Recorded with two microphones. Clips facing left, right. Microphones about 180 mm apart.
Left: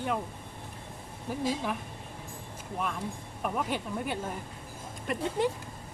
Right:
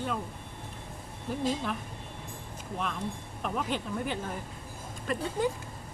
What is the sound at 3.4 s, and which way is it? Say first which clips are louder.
Speech: left 1 dB; 10° left (ahead or behind).